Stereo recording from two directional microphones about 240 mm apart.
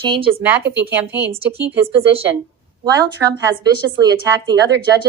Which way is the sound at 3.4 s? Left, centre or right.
Centre.